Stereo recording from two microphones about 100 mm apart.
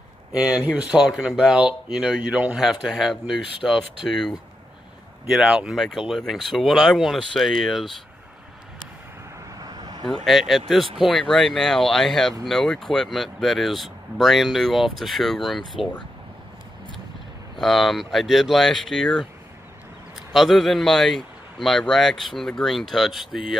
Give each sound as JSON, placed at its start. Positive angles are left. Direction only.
{"t": 0.4, "sound": "speech", "side_deg": -10}
{"t": 3.6, "sound": "speech", "side_deg": 10}
{"t": 9.6, "sound": "vehicle", "side_deg": -40}
{"t": 10.2, "sound": "speech", "side_deg": 0}
{"t": 17.6, "sound": "speech", "side_deg": 0}
{"t": 20.3, "sound": "speech", "side_deg": 0}